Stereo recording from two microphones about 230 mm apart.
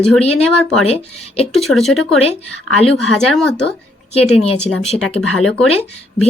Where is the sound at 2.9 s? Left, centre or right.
Centre.